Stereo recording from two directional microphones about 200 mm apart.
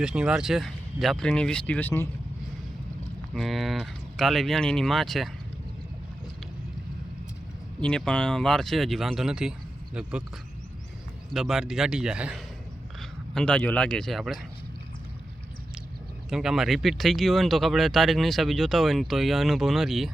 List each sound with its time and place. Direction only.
0.0 s speech: 5° right (ahead or behind)
3.3 s speech: centre (ahead or behind)
7.8 s speech: 5° left (ahead or behind)
11.3 s speech: centre (ahead or behind)
16.3 s speech: centre (ahead or behind)